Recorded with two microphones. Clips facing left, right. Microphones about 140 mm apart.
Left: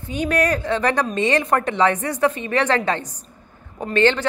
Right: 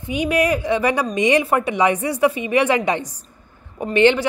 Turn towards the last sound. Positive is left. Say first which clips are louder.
# right 3 dB
turn(degrees=-15)  # may be behind; listen again after turning